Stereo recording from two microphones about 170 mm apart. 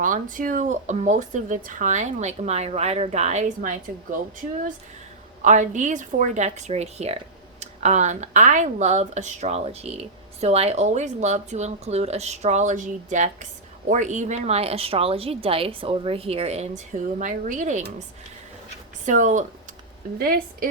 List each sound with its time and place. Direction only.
0.0 s speech: 50° right (ahead or behind)
5.4 s speech: 45° right (ahead or behind)
19.0 s speech: 45° right (ahead or behind)
20.1 s a woman's voice: 60° right (ahead or behind)